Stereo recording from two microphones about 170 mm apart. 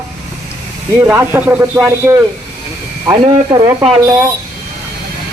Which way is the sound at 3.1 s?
25° right (ahead or behind).